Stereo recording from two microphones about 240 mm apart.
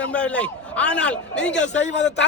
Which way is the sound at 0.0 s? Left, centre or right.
Centre.